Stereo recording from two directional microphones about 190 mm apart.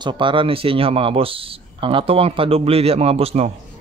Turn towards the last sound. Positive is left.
turn(degrees=-30)  # may be behind; listen again after turning